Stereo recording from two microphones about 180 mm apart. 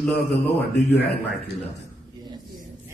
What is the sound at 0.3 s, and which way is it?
Speech, 65° left (ahead or behind).